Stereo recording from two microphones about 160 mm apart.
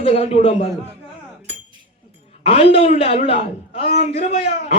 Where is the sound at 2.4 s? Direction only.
35° left (ahead or behind).